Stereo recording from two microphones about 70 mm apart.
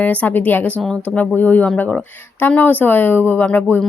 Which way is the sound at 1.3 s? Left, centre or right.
Left.